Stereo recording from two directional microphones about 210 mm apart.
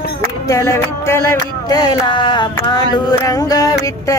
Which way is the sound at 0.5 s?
15° left (ahead or behind).